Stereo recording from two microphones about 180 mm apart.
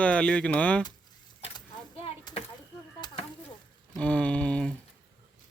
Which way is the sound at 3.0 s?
20° left (ahead or behind).